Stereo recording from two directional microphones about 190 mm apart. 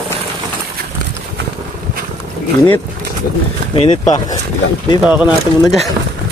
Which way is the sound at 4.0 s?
20° left (ahead or behind).